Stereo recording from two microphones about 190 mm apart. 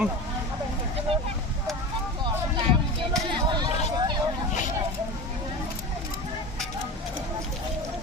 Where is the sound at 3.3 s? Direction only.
25° right (ahead or behind).